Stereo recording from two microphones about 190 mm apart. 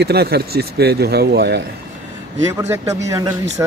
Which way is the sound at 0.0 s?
55° right (ahead or behind).